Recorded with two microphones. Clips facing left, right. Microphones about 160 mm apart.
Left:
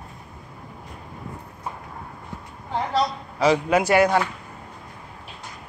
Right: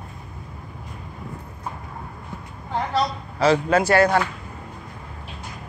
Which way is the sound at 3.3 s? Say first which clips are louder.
Right 1 dB; 15° left (ahead or behind).